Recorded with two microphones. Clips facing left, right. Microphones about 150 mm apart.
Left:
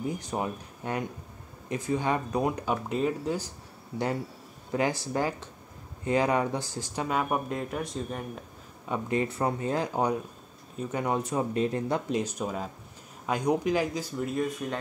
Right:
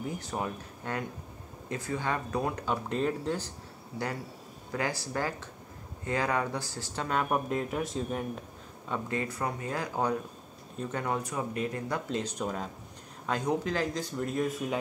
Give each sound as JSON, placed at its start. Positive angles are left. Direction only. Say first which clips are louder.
{"t": 0.0, "sound": "speech", "louder": "left 3 dB", "side_deg": 20}
{"t": 4.7, "sound": "speech", "louder": "left 5 dB", "side_deg": 20}
{"t": 8.8, "sound": "speech", "louder": "left 4 dB", "side_deg": 15}
{"t": 12.1, "sound": "speech", "louder": "left 3 dB", "side_deg": 10}
{"t": 14.1, "sound": "speech", "louder": "left 1 dB", "side_deg": 0}